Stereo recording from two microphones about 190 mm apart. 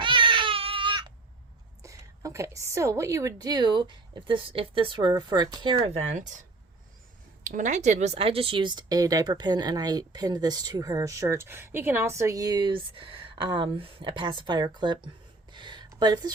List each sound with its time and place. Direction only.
0.0 s baby cry: 25° right (ahead or behind)
1.8 s speech: 15° right (ahead or behind); by 6.3 s 40° right (ahead or behind)
7.4 s speech: 40° right (ahead or behind); by 15.1 s 25° right (ahead or behind)
15.5 s a sound: 25° right (ahead or behind)